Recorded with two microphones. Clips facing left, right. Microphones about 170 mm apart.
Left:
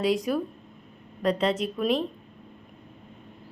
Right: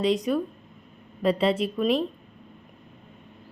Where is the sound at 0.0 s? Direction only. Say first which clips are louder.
Right 1 dB; 5° left (ahead or behind).